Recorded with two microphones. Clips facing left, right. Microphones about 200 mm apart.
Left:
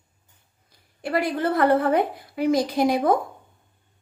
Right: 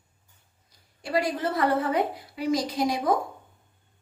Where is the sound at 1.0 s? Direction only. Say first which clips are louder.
Left 3 dB; 55° left (ahead or behind).